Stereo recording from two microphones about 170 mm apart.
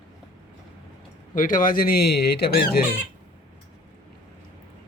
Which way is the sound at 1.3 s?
55° left (ahead or behind).